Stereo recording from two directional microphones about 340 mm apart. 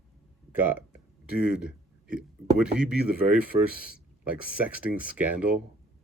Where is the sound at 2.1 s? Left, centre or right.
Centre.